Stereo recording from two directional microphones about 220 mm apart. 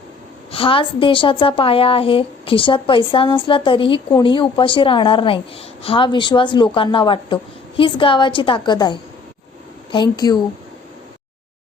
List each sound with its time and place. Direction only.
0.5 s a woman's voice: 25° left (ahead or behind)